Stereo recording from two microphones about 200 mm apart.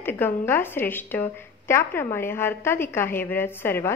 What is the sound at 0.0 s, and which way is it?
A woman's voice, 10° left (ahead or behind).